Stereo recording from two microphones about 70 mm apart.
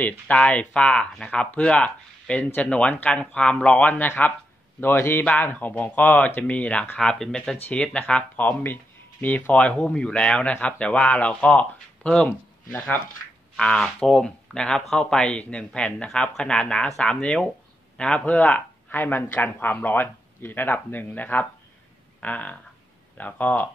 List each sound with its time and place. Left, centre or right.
0.3 s speech: centre
4.7 s a man's voice: left
7.0 s speech: centre